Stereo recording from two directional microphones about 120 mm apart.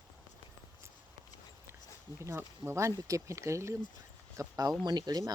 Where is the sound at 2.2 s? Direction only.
25° right (ahead or behind).